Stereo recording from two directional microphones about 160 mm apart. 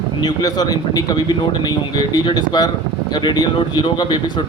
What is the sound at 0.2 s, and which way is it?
Speech, 25° left (ahead or behind).